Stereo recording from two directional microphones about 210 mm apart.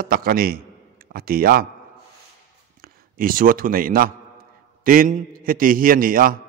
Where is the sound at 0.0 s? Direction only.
45° right (ahead or behind).